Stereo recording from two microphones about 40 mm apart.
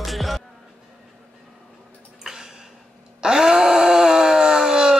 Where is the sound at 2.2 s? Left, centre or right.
Centre.